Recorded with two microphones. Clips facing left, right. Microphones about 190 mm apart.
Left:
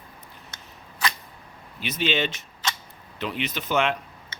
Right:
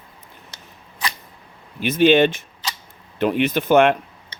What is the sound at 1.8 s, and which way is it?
Speech, 50° right (ahead or behind).